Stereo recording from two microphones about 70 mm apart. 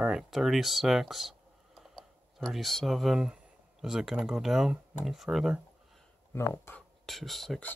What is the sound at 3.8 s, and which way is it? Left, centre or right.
Speech, centre.